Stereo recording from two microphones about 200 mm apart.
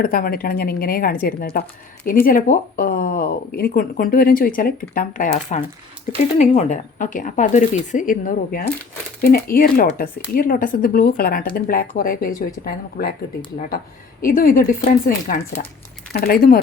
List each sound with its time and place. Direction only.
0.0 s speech: 45° left (ahead or behind)
14.2 s speech: 45° left (ahead or behind)